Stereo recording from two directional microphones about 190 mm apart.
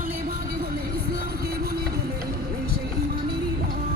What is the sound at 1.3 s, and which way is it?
Music, 55° right (ahead or behind).